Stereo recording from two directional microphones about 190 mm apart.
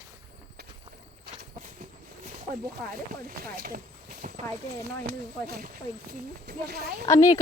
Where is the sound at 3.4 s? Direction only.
50° right (ahead or behind).